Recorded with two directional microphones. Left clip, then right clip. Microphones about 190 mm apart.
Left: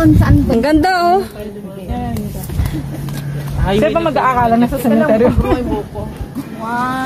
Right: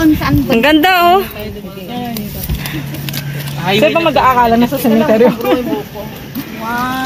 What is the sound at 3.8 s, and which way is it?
Speech, 35° right (ahead or behind).